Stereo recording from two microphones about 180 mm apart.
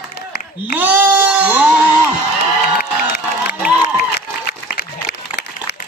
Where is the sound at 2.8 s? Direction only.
60° left (ahead or behind).